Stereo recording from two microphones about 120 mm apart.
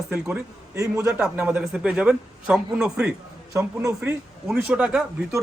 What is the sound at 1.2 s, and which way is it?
A man's voice, 10° right (ahead or behind).